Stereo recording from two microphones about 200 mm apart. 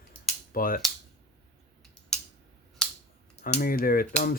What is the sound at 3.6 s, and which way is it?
Speech, 45° left (ahead or behind).